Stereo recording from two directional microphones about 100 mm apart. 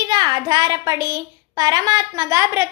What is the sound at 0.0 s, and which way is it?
A woman's voice, 45° right (ahead or behind).